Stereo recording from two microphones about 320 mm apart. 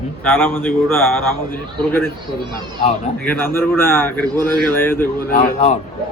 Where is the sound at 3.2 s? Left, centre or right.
Centre.